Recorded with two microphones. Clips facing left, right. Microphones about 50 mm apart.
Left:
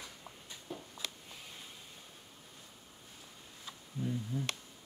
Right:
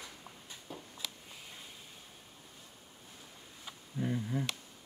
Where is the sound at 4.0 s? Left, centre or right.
Right.